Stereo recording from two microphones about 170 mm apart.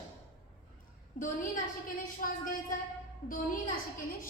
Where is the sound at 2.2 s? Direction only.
55° left (ahead or behind).